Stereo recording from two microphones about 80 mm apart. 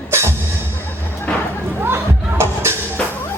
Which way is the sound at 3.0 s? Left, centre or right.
Centre.